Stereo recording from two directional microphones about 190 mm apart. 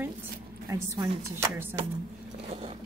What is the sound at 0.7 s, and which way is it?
Speech, 15° right (ahead or behind).